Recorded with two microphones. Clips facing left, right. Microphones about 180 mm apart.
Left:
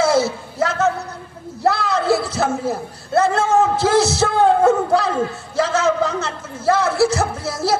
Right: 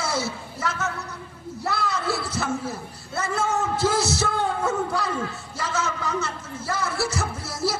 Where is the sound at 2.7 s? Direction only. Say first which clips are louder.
Left 13 dB; 75° left (ahead or behind).